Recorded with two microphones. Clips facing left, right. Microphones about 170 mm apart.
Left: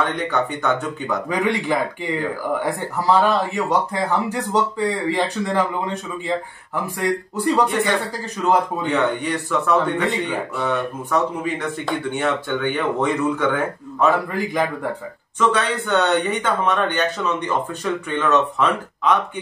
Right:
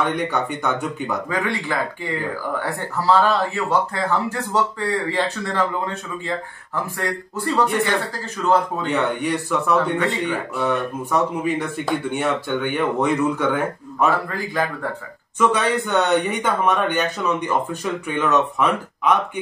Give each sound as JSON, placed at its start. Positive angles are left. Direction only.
{"t": 0.0, "sound": "speech", "side_deg": -10}
{"t": 1.3, "sound": "speech", "side_deg": 15}
{"t": 8.9, "sound": "speech", "side_deg": -10}
{"t": 14.3, "sound": "speech", "side_deg": 15}
{"t": 15.3, "sound": "speech", "side_deg": -10}